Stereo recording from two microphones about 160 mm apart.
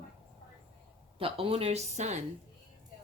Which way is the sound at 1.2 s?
35° right (ahead or behind).